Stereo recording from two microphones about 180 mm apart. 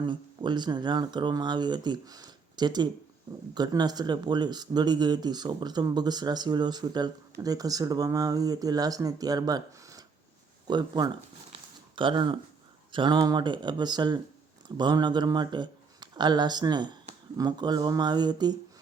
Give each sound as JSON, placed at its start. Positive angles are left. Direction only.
{"t": 0.0, "sound": "speech", "side_deg": -25}
{"t": 11.5, "sound": "a sound", "side_deg": -25}
{"t": 12.9, "sound": "speech", "side_deg": -25}